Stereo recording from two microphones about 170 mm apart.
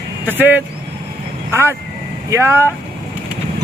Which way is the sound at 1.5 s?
15° right (ahead or behind).